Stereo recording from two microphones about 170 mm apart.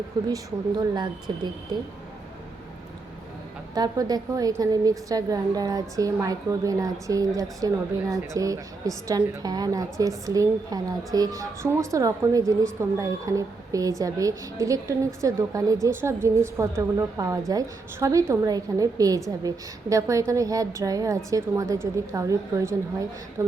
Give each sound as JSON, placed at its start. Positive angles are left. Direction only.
{"t": 0.1, "sound": "a woman's voice", "side_deg": -25}
{"t": 3.8, "sound": "a woman's voice", "side_deg": -25}